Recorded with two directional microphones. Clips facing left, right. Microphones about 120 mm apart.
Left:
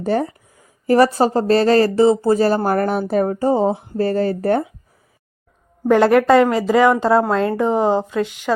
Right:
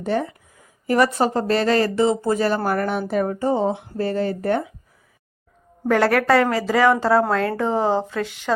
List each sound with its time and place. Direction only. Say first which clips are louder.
0.0 s speech: left 4 dB; 40° left (ahead or behind)
5.9 s a woman's voice: left 5 dB; 20° left (ahead or behind)